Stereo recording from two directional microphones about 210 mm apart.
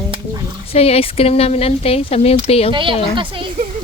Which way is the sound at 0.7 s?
30° left (ahead or behind).